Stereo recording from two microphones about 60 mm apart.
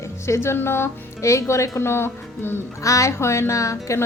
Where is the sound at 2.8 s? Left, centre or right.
Left.